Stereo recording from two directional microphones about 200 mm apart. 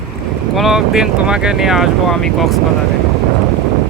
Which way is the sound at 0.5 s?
Centre (ahead or behind).